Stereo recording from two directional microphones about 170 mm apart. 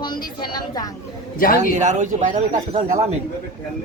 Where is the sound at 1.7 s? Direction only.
45° right (ahead or behind).